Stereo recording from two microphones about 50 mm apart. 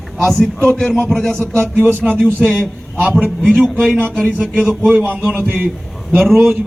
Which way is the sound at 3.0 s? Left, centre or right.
Right.